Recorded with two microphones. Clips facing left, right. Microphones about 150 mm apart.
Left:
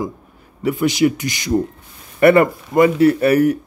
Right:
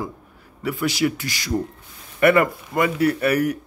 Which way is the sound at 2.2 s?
30° left (ahead or behind).